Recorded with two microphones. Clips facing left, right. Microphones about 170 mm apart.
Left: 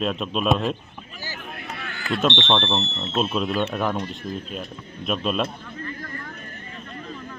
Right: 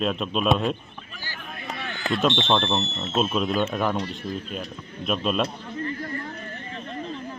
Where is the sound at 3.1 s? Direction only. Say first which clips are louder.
Even; centre (ahead or behind).